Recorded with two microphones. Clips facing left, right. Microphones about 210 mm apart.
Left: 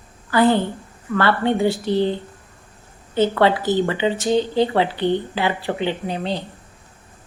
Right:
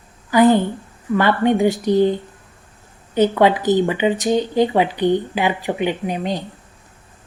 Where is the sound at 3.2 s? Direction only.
15° right (ahead or behind).